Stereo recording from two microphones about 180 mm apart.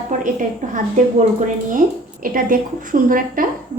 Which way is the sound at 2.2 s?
50° right (ahead or behind).